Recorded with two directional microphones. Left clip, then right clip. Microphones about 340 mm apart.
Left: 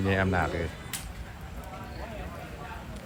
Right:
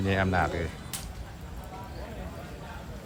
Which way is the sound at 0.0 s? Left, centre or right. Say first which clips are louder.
Even; centre.